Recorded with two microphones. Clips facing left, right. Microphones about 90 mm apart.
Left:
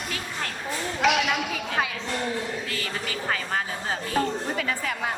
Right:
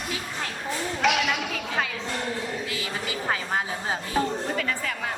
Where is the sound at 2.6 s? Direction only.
15° right (ahead or behind).